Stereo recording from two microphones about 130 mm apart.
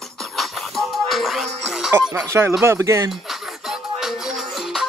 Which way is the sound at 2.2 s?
25° right (ahead or behind).